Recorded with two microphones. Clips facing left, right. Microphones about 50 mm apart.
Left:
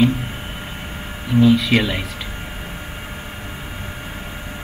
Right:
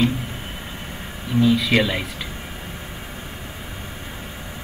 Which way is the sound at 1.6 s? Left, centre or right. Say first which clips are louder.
Left 1 dB; centre.